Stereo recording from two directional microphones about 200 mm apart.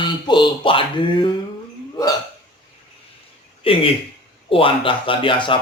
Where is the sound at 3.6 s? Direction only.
25° left (ahead or behind).